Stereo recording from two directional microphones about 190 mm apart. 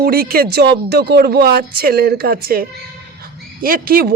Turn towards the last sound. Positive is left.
turn(degrees=-50)  # may be behind; listen again after turning